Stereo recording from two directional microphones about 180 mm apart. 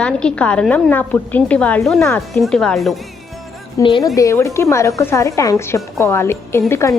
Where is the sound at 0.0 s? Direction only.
5° left (ahead or behind).